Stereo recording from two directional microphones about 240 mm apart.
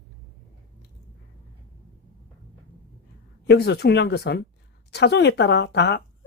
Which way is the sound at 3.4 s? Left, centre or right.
Left.